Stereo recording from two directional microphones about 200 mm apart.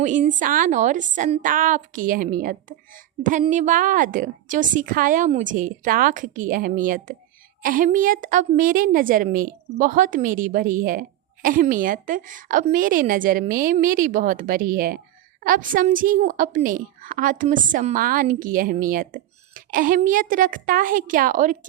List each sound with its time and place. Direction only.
0.0 s a woman's voice: 40° right (ahead or behind)